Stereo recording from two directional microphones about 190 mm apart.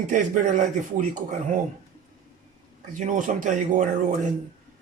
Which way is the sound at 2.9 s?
40° right (ahead or behind).